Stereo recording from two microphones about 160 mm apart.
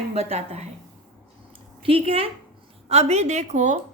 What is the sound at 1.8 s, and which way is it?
A woman's voice, 35° right (ahead or behind).